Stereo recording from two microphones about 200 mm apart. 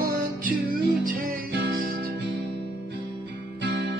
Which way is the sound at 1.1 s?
55° right (ahead or behind).